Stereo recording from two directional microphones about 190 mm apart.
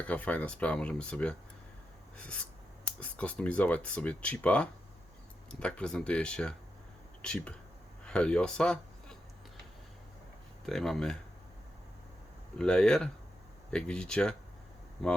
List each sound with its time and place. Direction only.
0.0 s speech: 5° left (ahead or behind)
2.1 s a sound: 5° left (ahead or behind)
3.0 s speech: 5° left (ahead or behind)
10.7 s speech: centre (ahead or behind)
12.5 s speech: 5° left (ahead or behind)